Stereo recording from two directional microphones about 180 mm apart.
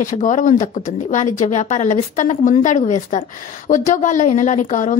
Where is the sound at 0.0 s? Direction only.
45° left (ahead or behind).